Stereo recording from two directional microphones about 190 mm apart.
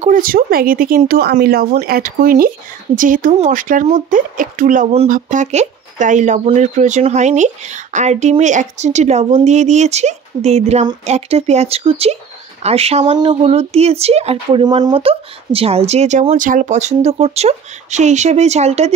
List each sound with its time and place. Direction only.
0.0 s speech: 50° right (ahead or behind)